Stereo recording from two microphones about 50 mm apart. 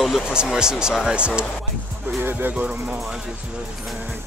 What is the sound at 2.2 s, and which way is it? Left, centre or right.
Music, right.